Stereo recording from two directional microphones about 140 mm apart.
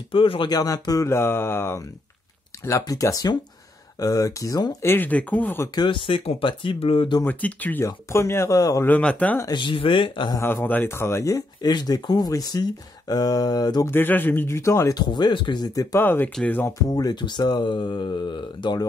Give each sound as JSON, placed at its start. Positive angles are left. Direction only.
{"t": 0.1, "sound": "speech", "side_deg": 35}
{"t": 4.8, "sound": "speech", "side_deg": 15}
{"t": 5.8, "sound": "speech", "side_deg": 35}
{"t": 7.2, "sound": "speech", "side_deg": 10}
{"t": 8.8, "sound": "speech", "side_deg": 10}
{"t": 9.4, "sound": "speech", "side_deg": 35}
{"t": 10.3, "sound": "speech", "side_deg": 15}
{"t": 13.8, "sound": "speech", "side_deg": 15}
{"t": 16.9, "sound": "speech", "side_deg": 30}